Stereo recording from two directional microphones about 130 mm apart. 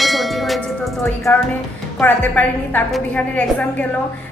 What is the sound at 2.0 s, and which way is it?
A woman's voice, 15° left (ahead or behind).